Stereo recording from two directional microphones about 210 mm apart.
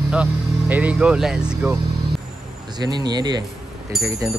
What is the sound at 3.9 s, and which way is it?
Speech, centre (ahead or behind).